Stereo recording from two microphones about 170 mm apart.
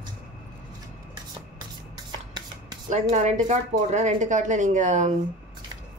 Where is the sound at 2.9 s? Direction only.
45° right (ahead or behind).